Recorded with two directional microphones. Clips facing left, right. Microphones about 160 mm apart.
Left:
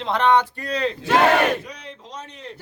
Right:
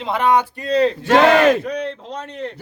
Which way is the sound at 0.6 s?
35° right (ahead or behind).